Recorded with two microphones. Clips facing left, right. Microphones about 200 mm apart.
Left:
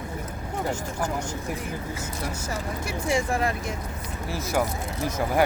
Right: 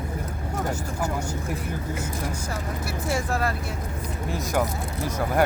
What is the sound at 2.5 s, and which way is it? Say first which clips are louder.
Speech: even; 15° left (ahead or behind).